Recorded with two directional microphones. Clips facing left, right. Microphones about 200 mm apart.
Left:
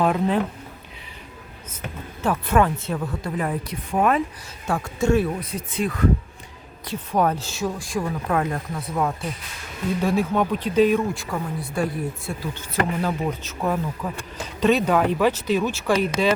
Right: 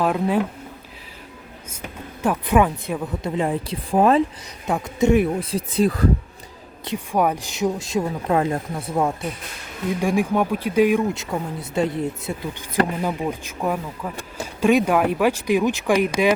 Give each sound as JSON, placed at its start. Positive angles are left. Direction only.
{"t": 0.0, "sound": "speech", "side_deg": -5}
{"t": 2.2, "sound": "speech", "side_deg": -15}
{"t": 3.2, "sound": "speech", "side_deg": -25}
{"t": 4.6, "sound": "speech", "side_deg": -20}
{"t": 5.4, "sound": "speech", "side_deg": -30}
{"t": 6.8, "sound": "speech", "side_deg": -15}
{"t": 10.0, "sound": "speech", "side_deg": -15}